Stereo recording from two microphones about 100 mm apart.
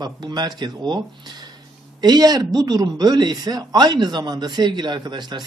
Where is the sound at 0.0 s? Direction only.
45° right (ahead or behind).